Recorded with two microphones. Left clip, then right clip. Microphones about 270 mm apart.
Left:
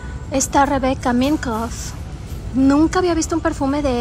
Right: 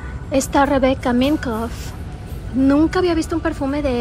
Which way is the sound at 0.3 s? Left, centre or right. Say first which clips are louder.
Even; centre.